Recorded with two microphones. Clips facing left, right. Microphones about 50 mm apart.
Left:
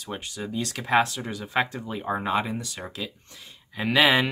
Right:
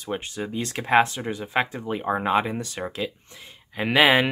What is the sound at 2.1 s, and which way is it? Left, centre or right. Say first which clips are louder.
Speech: right 3 dB; right.